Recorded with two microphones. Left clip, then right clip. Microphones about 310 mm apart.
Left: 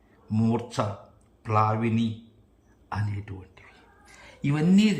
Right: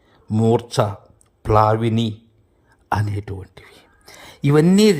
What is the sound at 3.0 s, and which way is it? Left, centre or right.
Speech, centre.